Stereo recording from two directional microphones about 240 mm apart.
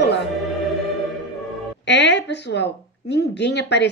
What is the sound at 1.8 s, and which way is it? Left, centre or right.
A woman's voice, left.